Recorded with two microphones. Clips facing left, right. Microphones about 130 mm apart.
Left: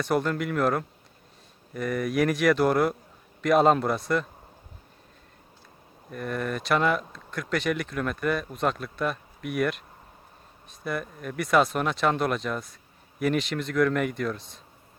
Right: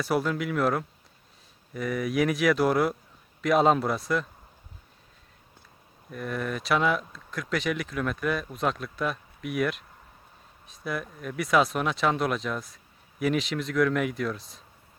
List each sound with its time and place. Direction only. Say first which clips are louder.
0.0 s speech: left 1 dB; 5° right (ahead or behind)
6.1 s speech: left 1 dB; centre (ahead or behind)